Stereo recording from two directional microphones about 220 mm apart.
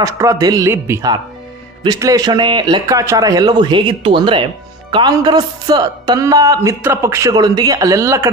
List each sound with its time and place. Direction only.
0.0 s speech: 15° right (ahead or behind)